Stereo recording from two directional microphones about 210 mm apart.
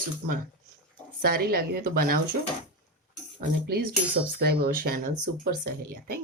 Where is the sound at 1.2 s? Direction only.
45° right (ahead or behind).